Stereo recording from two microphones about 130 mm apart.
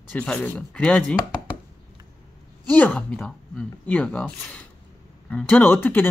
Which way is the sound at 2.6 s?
15° left (ahead or behind).